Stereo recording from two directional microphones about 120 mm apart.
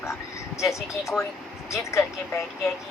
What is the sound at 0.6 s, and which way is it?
Speech, 25° left (ahead or behind).